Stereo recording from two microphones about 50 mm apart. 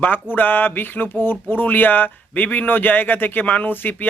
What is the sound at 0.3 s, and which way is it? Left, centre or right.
Speech, left.